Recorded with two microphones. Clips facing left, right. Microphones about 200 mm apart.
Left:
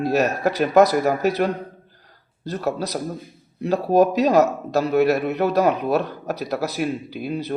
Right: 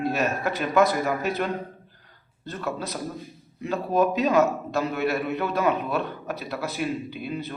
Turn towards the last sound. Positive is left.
turn(degrees=40)  # may be behind; listen again after turning